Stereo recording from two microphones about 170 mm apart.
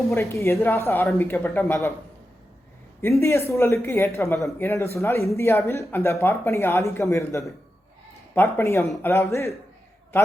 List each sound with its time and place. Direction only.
0.1 s speech: 15° left (ahead or behind)
3.0 s speech: 15° left (ahead or behind)